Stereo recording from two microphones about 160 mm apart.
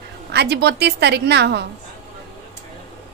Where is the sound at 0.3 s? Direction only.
90° right.